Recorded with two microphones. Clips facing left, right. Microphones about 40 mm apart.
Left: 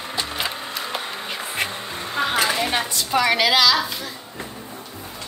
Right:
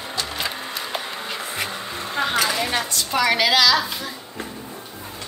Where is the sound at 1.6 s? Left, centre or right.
Left.